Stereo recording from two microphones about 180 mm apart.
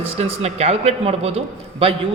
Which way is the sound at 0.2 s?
35° right (ahead or behind).